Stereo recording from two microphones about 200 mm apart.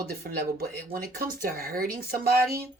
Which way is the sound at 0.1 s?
50° right (ahead or behind).